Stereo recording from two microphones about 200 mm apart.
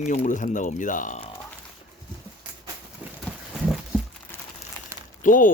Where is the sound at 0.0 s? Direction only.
40° left (ahead or behind).